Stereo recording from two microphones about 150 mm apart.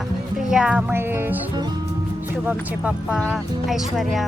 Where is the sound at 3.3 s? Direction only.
Centre (ahead or behind).